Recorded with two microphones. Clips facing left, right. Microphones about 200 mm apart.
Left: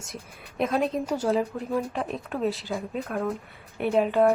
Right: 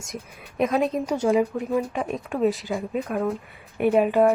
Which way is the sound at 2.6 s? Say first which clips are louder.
Right 4 dB; 10° right (ahead or behind).